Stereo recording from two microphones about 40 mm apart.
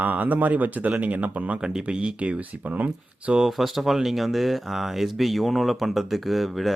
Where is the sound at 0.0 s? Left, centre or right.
Right.